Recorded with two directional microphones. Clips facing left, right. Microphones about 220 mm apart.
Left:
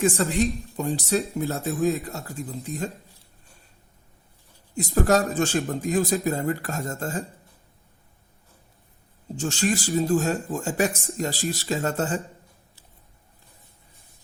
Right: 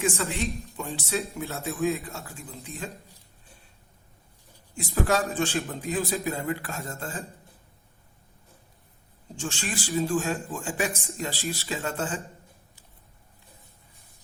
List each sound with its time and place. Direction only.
0.0 s speech: 40° left (ahead or behind)
4.7 s a man's voice: 40° left (ahead or behind)
9.3 s speech: 40° left (ahead or behind)